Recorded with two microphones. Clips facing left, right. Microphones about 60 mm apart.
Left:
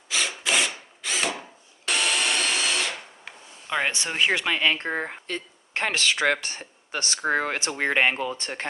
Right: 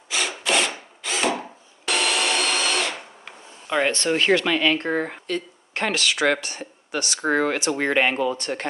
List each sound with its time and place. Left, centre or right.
0.4 s drill: centre
1.9 s tools: centre; by 6.1 s left
6.4 s speech: left
7.2 s speech: right
7.8 s speech: left
8.1 s speech: right
8.4 s speech: left